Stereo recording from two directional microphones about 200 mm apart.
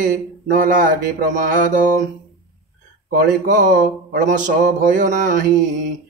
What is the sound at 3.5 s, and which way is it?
Speech, 40° right (ahead or behind).